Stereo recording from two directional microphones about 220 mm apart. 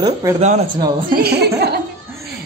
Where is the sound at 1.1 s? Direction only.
45° right (ahead or behind).